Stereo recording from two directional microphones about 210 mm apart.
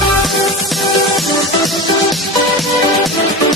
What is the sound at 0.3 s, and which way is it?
Music, centre (ahead or behind).